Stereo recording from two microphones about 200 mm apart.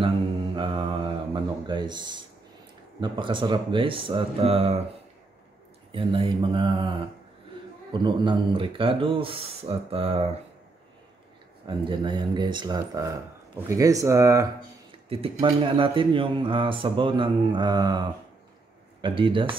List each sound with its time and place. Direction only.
0.6 s mantra: 25° right (ahead or behind)
3.0 s speech: 25° right (ahead or behind)
5.9 s speech: 25° right (ahead or behind)
11.6 s speech: 25° right (ahead or behind)
15.0 s speech: 25° right (ahead or behind)